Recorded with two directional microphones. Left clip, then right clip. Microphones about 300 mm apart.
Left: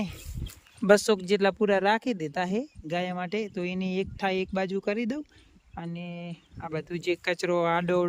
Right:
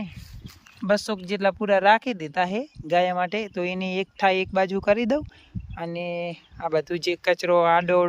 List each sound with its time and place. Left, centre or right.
0.9 s speech: centre